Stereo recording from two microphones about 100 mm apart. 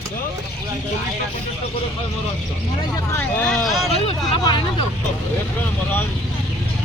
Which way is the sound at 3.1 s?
25° left (ahead or behind).